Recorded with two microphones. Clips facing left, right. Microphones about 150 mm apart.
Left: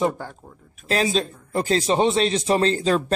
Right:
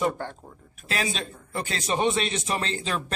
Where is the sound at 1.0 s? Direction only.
35° left (ahead or behind).